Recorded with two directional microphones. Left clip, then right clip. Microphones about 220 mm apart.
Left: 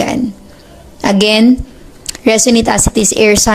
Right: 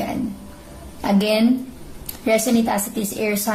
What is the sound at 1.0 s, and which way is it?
A woman's voice, 35° left (ahead or behind).